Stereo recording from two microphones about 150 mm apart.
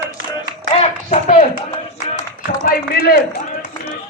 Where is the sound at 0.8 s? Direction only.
45° left (ahead or behind).